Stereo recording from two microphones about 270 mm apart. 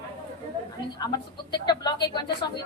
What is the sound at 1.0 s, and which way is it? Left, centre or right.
A woman's voice, centre.